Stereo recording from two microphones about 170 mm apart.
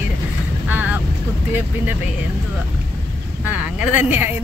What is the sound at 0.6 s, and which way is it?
Speech, 10° right (ahead or behind).